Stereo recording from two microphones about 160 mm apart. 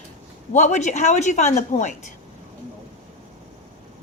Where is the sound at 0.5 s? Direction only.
50° left (ahead or behind).